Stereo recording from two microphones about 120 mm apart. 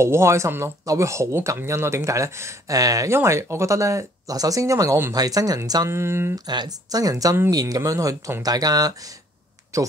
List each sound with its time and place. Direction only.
0.0 s speech: 20° right (ahead or behind)
6.3 s speech: 35° right (ahead or behind)